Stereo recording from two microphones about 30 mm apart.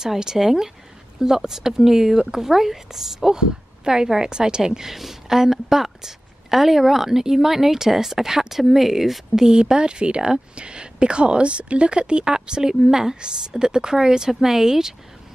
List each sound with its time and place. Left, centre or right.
0.0 s a woman's voice: centre
3.3 s a woman's voice: right
4.8 s a woman's voice: centre